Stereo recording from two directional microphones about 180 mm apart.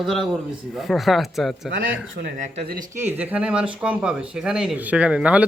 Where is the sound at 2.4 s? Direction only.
50° right (ahead or behind).